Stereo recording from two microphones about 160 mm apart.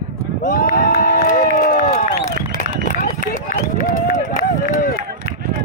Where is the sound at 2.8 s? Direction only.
55° left (ahead or behind).